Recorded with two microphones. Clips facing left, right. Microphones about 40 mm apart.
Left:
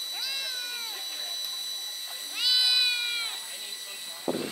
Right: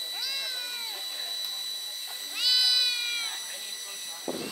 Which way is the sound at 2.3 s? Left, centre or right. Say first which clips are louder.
Left 1 dB; centre.